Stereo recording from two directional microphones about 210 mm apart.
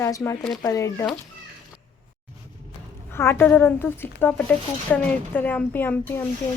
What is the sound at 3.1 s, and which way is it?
Speech, 10° left (ahead or behind).